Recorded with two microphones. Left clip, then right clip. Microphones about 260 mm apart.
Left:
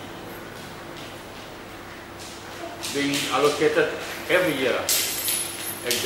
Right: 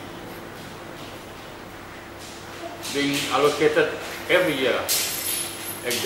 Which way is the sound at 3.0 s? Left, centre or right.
Centre.